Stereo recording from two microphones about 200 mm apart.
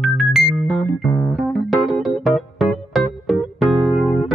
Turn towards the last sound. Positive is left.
turn(degrees=0)  # may be behind; listen again after turning